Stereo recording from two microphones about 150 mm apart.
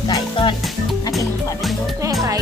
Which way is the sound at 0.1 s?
35° left (ahead or behind).